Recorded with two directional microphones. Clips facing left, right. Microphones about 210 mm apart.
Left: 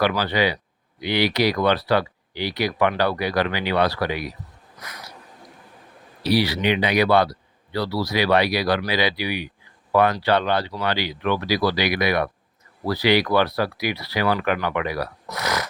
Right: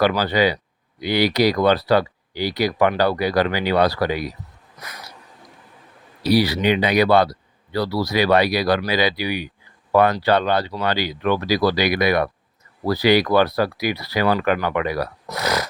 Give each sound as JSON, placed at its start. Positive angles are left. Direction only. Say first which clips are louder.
{"t": 0.0, "sound": "speech", "louder": "right 3 dB", "side_deg": -40}
{"t": 6.2, "sound": "speech", "louder": "right 3 dB", "side_deg": -40}
{"t": 15.3, "sound": "a sound", "louder": "right 4 dB", "side_deg": -30}